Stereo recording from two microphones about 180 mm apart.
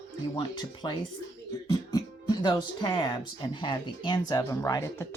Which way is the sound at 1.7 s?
20° left (ahead or behind).